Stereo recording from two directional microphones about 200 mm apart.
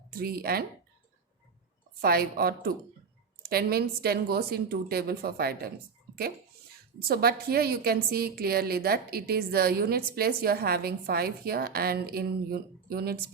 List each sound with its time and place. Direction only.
0.1 s a woman's voice: 50° right (ahead or behind)
2.0 s a woman's voice: 50° right (ahead or behind)
7.1 s a woman's voice: 50° right (ahead or behind)